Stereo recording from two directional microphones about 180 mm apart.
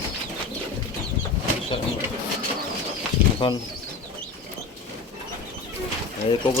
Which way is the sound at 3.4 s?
25° left (ahead or behind).